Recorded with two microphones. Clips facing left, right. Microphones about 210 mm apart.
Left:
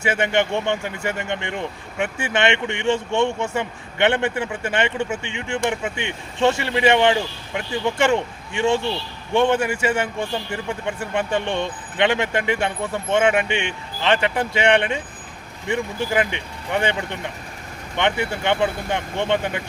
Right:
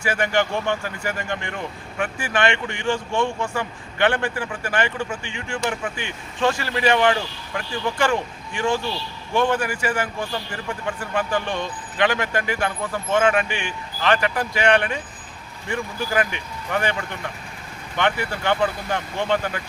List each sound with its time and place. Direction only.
0.0 s a man's voice: 25° left (ahead or behind)